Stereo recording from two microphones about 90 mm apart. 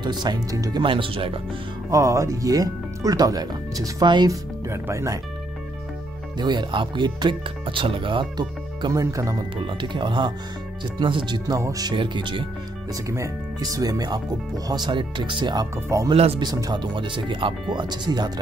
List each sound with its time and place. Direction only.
0.0 s speech: 55° right (ahead or behind)
0.8 s speech: 70° right (ahead or behind)
1.9 s speech: 40° right (ahead or behind)
4.3 s speech: 30° right (ahead or behind)
6.3 s speech: 55° right (ahead or behind)
8.9 s speech: 40° right (ahead or behind)
9.7 s speech: 65° right (ahead or behind); by 11.9 s 40° right (ahead or behind)
11.9 s speech: 60° right (ahead or behind)
13.1 s speech: 40° right (ahead or behind)
14.7 s speech: 55° right (ahead or behind)
15.7 s speech: 35° right (ahead or behind)
16.1 s speech: 75° right (ahead or behind)
16.4 s speech: 50° right (ahead or behind); by 17.6 s 65° right (ahead or behind)
17.7 s speech: 55° right (ahead or behind)